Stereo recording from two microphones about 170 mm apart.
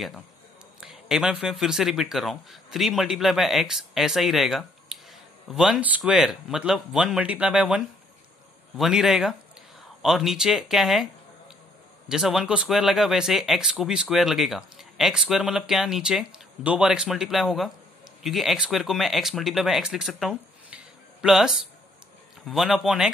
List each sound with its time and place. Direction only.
0.7 s speech: 5° right (ahead or behind)
12.1 s speech: centre (ahead or behind)